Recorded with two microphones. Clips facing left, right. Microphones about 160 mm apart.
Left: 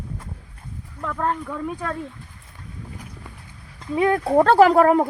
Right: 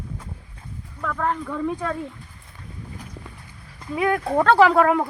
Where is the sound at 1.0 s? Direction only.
15° left (ahead or behind).